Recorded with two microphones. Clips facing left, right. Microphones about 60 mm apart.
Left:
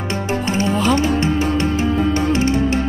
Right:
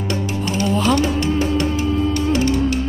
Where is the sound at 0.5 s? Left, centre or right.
Left.